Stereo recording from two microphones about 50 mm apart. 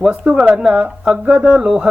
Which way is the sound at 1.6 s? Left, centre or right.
Centre.